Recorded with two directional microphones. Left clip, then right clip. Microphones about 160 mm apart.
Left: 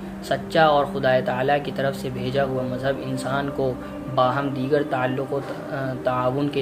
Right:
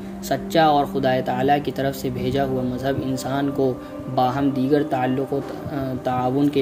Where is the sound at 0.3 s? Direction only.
50° right (ahead or behind).